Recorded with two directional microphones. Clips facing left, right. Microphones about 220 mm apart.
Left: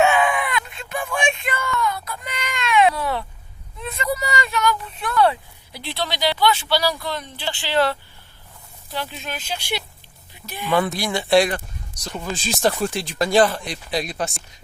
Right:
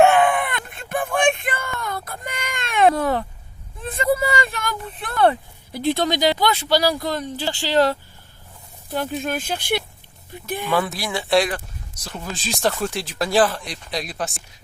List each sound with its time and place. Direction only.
0.0 s a sound: 55° right (ahead or behind)
6.4 s speech: 40° right (ahead or behind)
9.0 s speech: 50° right (ahead or behind)
10.7 s speech: centre (ahead or behind)